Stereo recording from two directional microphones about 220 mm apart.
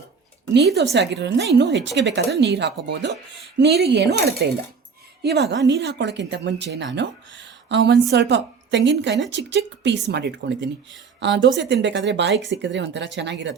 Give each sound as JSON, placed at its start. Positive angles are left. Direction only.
{"t": 0.8, "sound": "speech", "side_deg": -50}